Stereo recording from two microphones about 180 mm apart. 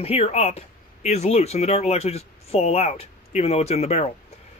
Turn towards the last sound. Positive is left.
turn(degrees=35)  # may be behind; listen again after turning